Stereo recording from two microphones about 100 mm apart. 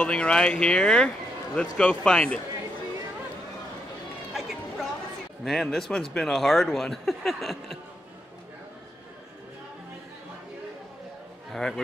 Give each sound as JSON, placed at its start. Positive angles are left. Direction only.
{"t": 0.0, "sound": "speech", "side_deg": 10}
{"t": 4.3, "sound": "a sound", "side_deg": 0}
{"t": 5.4, "sound": "speech", "side_deg": 0}
{"t": 11.5, "sound": "a man's voice", "side_deg": 5}